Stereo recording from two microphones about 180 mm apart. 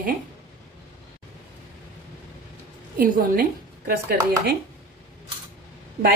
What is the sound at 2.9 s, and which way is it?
A woman's voice, 50° right (ahead or behind).